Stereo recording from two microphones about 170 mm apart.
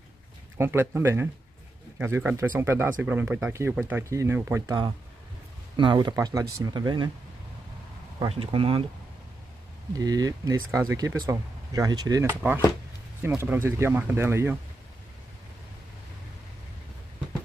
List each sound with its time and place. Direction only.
0.6 s speech: 15° right (ahead or behind)
8.3 s speech: 30° right (ahead or behind)
9.9 s speech: 20° right (ahead or behind)